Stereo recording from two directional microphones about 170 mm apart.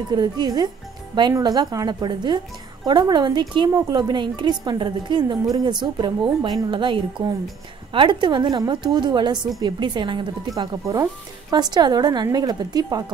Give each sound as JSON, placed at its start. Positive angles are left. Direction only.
{"t": 0.1, "sound": "a woman's voice", "side_deg": -25}